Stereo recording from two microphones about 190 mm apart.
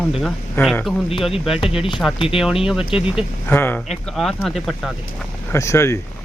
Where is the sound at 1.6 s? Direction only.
30° left (ahead or behind).